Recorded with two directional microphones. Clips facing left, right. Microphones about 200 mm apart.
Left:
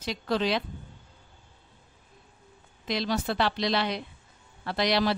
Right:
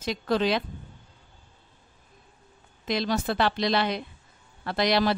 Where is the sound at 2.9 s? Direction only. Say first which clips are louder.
Right 2 dB; 50° right (ahead or behind).